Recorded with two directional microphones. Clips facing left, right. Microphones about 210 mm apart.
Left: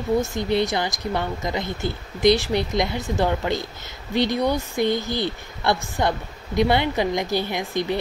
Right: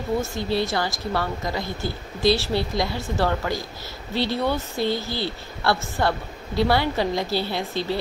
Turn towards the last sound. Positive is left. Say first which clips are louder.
# left 1 dB
turn(degrees=15)  # may be behind; listen again after turning